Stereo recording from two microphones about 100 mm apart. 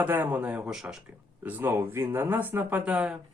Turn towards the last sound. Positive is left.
turn(degrees=-10)  # may be behind; listen again after turning